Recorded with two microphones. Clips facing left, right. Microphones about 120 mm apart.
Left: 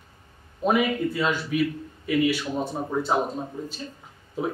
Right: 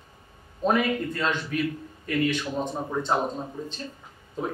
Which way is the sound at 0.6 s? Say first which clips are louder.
Left 1 dB; 10° left (ahead or behind).